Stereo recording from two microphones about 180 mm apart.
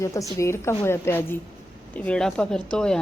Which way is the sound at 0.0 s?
15° left (ahead or behind).